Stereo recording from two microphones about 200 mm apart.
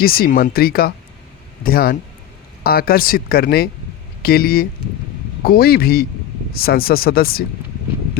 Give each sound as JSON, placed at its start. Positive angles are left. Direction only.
{"t": 0.0, "sound": "speech", "side_deg": 50}